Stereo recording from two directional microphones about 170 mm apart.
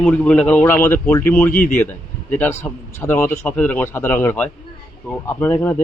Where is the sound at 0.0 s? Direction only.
5° left (ahead or behind).